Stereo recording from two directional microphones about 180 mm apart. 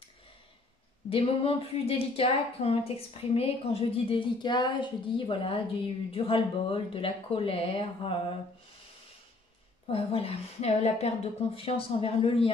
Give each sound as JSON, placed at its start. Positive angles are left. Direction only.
{"t": 1.1, "sound": "a woman's voice", "side_deg": 30}
{"t": 9.8, "sound": "a woman's voice", "side_deg": 30}